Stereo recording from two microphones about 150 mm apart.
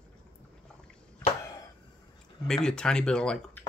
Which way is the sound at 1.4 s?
20° left (ahead or behind).